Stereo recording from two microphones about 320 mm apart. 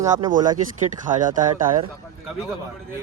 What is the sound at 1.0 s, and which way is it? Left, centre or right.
Speech, right.